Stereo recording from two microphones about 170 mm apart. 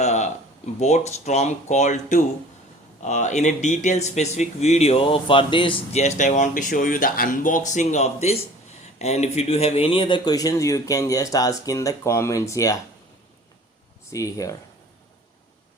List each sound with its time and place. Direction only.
0.0 s a man's voice: 40° left (ahead or behind); by 12.8 s 20° left (ahead or behind)
14.1 s a man's voice: 20° left (ahead or behind)